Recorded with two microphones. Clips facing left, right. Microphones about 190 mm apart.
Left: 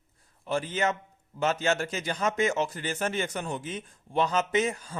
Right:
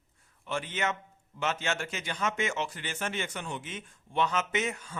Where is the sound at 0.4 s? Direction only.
35° left (ahead or behind).